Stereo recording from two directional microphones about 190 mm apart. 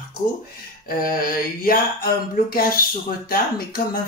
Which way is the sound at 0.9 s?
50° left (ahead or behind).